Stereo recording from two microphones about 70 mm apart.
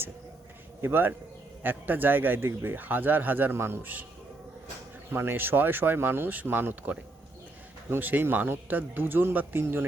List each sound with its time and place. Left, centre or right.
0.8 s speech: right
5.1 s speech: right